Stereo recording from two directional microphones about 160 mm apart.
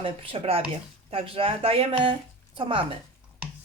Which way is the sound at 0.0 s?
35° right (ahead or behind).